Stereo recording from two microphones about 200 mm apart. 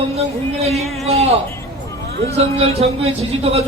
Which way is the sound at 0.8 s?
Centre (ahead or behind).